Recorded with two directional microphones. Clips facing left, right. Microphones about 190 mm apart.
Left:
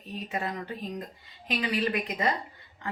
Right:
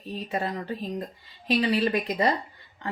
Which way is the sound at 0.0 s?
35° right (ahead or behind).